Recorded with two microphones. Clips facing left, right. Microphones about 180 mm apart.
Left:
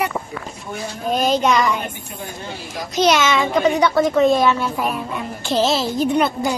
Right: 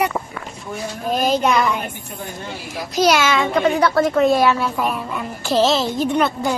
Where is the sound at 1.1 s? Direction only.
Centre (ahead or behind).